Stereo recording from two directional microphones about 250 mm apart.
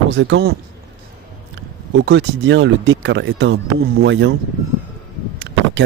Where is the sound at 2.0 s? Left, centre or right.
Right.